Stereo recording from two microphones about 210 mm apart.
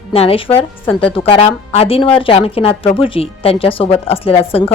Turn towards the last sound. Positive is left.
turn(degrees=30)  # may be behind; listen again after turning